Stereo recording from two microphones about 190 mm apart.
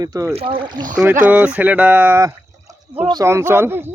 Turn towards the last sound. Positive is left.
turn(degrees=-10)  # may be behind; listen again after turning